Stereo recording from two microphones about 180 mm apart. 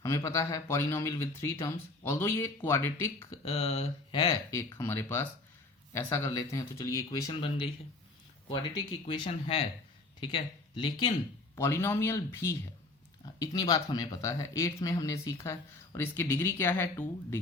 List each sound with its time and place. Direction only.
0.0 s speech: 15° left (ahead or behind)
3.5 s speech: 35° left (ahead or behind); by 17.1 s 15° left (ahead or behind)